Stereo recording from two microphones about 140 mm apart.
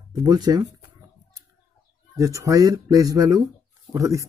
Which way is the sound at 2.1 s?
25° right (ahead or behind).